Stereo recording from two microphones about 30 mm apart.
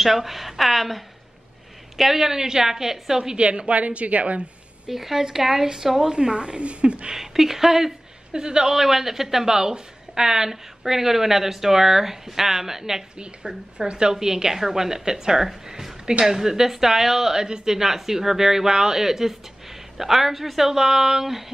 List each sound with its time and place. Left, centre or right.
0.0 s a woman's voice: centre
2.0 s a woman's voice: centre
3.3 s a woman's voice: right
4.8 s a woman's voice: centre
6.1 s a woman's voice: right
7.2 s a woman's voice: centre
8.3 s a woman's voice: right
8.7 s a woman's voice: centre; by 14.1 s right
14.2 s a woman's voice: centre
15.6 s a sound: centre
16.3 s a woman's voice: centre